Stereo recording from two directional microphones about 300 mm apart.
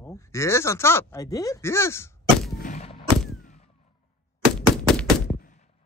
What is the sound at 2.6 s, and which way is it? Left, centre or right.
Gunshot, left.